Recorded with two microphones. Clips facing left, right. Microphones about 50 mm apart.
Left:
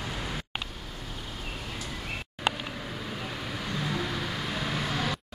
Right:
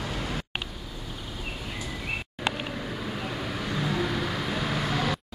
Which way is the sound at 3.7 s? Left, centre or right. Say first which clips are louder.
Right 3 dB; centre.